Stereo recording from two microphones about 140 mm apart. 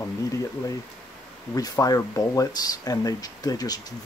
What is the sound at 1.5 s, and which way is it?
Speech, 25° left (ahead or behind).